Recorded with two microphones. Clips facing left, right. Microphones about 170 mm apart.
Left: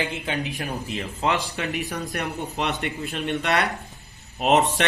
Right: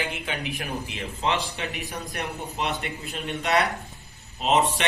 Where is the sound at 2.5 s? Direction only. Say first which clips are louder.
Left 2 dB; 65° left (ahead or behind).